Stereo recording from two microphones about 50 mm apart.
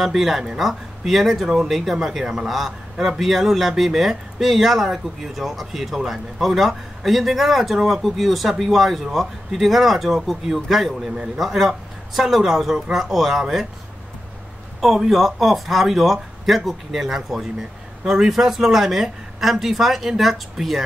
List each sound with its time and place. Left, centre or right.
0.0 s speech: centre
14.8 s speech: centre